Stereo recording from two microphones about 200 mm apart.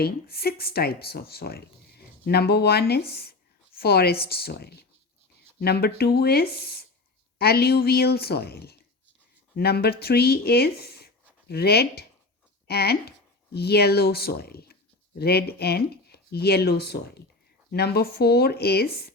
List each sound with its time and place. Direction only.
0.0 s speech: 50° left (ahead or behind)